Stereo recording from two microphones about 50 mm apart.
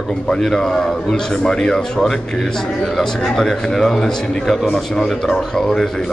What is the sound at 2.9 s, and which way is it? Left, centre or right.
A man's voice, centre.